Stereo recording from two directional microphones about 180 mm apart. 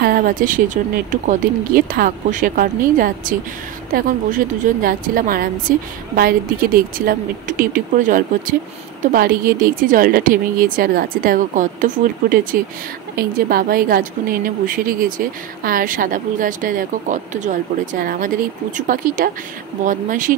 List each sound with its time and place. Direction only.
0.0 s a woman's voice: 55° right (ahead or behind)